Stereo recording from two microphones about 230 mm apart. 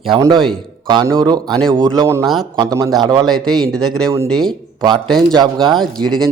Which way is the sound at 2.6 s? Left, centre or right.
Centre.